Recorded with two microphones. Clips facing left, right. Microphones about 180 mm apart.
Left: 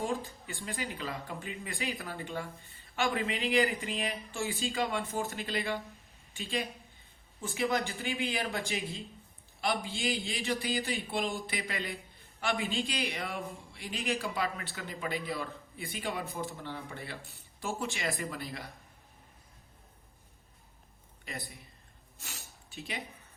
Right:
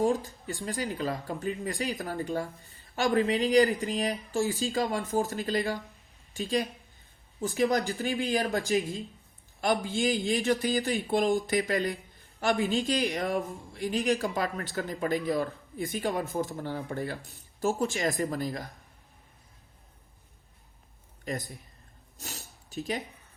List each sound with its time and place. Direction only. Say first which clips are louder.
0.0 s speech: right 8 dB; 40° right (ahead or behind)
21.2 s a man's voice: right 8 dB; 45° right (ahead or behind)
22.2 s a sound: right 6 dB; 40° right (ahead or behind)